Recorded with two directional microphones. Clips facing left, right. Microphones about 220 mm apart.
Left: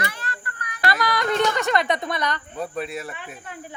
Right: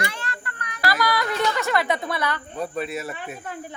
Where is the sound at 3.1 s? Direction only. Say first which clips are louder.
Right 4 dB; 40° right (ahead or behind).